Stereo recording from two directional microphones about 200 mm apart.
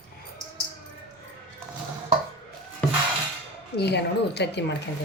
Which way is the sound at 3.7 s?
55° left (ahead or behind).